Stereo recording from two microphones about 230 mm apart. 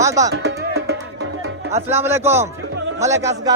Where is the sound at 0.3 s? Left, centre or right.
Right.